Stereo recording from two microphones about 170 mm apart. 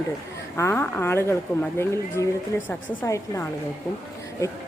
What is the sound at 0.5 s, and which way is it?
Speech, 15° left (ahead or behind).